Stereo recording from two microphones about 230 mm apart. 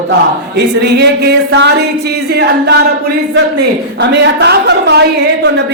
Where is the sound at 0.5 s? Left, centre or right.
Right.